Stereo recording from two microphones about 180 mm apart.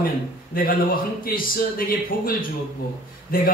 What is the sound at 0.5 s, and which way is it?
A man's voice, 55° left (ahead or behind).